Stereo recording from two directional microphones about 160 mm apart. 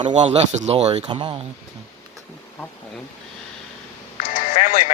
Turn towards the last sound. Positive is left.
turn(degrees=50)  # may be behind; listen again after turning